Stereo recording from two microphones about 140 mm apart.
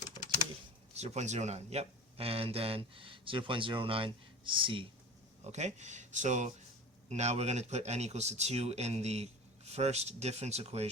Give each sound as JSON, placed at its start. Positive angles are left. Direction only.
{"t": 0.9, "sound": "speech", "side_deg": -50}
{"t": 5.4, "sound": "speech", "side_deg": -55}